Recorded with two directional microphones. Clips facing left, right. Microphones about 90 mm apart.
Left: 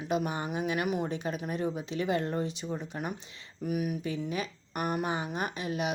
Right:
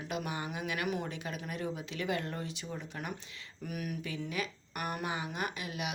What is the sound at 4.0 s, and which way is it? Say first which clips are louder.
Speech: left 4 dB; 30° left (ahead or behind).